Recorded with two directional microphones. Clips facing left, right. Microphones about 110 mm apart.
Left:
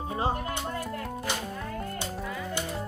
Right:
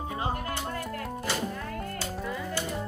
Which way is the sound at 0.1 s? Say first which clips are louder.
Left 4 dB; 30° left (ahead or behind).